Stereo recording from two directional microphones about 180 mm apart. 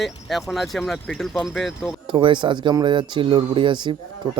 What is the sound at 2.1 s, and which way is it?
A man's voice, 25° right (ahead or behind).